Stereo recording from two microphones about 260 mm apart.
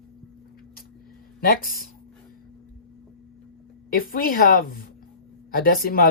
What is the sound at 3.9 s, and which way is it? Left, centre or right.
Speech, left.